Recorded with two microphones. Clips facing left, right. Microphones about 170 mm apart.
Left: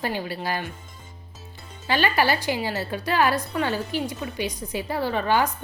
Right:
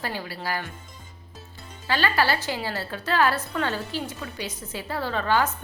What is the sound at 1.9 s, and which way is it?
A woman's voice, 15° left (ahead or behind).